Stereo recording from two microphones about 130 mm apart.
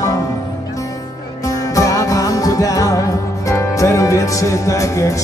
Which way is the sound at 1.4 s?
25° left (ahead or behind).